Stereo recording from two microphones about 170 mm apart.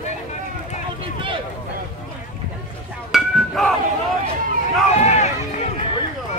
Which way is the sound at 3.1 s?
Centre (ahead or behind).